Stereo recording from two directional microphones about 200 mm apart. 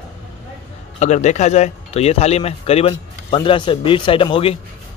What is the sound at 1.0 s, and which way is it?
Speech, 35° left (ahead or behind).